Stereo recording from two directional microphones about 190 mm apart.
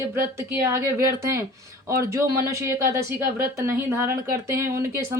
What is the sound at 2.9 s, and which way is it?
Speech, 50° right (ahead or behind).